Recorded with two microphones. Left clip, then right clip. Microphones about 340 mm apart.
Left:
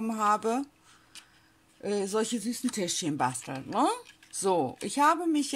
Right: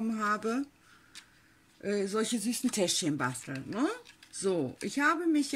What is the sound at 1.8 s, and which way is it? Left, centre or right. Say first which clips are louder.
Speech: left 2 dB; centre.